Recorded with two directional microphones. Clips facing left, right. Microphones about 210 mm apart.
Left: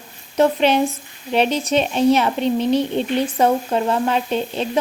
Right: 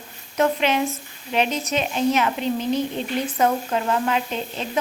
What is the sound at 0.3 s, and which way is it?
A woman's voice, 30° left (ahead or behind).